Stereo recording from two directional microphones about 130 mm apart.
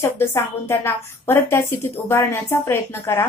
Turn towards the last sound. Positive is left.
turn(degrees=20)  # may be behind; listen again after turning